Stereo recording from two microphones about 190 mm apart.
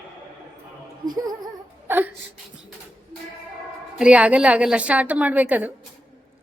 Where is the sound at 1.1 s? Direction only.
20° right (ahead or behind).